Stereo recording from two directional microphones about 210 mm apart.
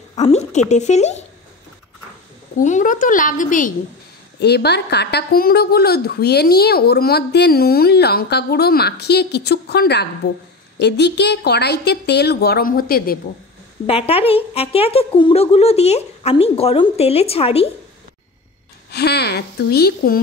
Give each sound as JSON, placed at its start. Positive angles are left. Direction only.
{"t": 0.1, "sound": "speech", "side_deg": 30}
{"t": 2.6, "sound": "speech", "side_deg": 35}
{"t": 4.4, "sound": "a woman's voice", "side_deg": 50}
{"t": 13.8, "sound": "a woman's voice", "side_deg": 25}
{"t": 18.9, "sound": "a woman's voice", "side_deg": 50}